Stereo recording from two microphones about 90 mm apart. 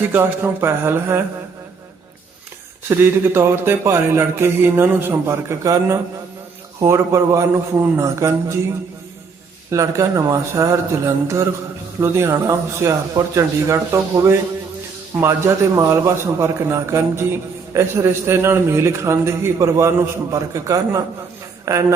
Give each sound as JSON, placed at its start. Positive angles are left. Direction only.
{"t": 0.0, "sound": "speech", "side_deg": -20}
{"t": 2.9, "sound": "a man's voice", "side_deg": -25}
{"t": 9.7, "sound": "a man's voice", "side_deg": -35}